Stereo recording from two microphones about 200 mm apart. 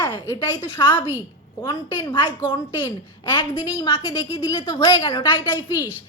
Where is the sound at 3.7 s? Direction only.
25° left (ahead or behind).